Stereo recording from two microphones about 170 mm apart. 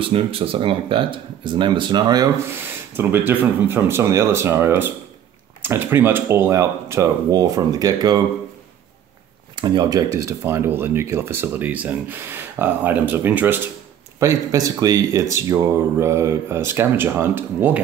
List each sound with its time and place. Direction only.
0.0 s speech: 35° right (ahead or behind)
2.9 s speech: 10° right (ahead or behind)
9.6 s speech: 25° right (ahead or behind)